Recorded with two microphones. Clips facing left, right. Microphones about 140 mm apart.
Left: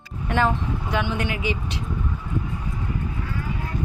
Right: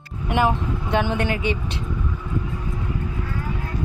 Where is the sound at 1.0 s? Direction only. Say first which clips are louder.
Right 3 dB; 35° right (ahead or behind).